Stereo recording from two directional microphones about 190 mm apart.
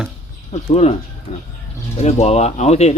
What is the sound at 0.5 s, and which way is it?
Speech, 35° left (ahead or behind).